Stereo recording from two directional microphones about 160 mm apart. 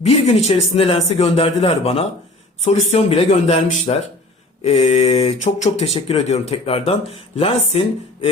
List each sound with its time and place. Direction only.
0.0 s speech: 40° left (ahead or behind)